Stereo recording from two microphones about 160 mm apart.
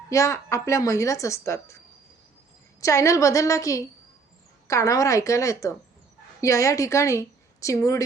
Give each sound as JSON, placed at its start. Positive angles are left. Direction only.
{"t": 0.1, "sound": "speech", "side_deg": 20}
{"t": 2.8, "sound": "a woman's voice", "side_deg": 20}